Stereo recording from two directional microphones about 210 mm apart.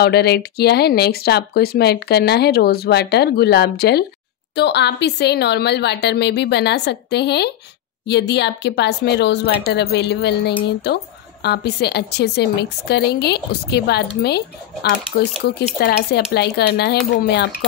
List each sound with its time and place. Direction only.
0.0 s speech: 50° left (ahead or behind)